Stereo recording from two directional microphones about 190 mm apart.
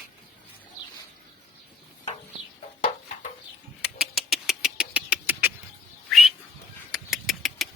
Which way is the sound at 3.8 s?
5° right (ahead or behind).